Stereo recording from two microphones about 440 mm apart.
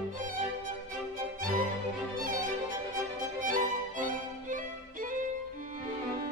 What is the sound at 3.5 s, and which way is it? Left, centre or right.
Music, centre.